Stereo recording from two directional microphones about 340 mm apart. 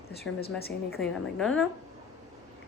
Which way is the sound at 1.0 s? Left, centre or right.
Centre.